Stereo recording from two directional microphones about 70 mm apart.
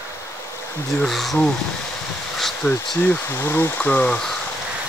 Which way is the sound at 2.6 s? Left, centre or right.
Left.